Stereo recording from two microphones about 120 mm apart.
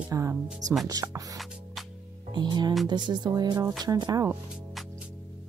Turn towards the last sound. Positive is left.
turn(degrees=-30)  # may be behind; listen again after turning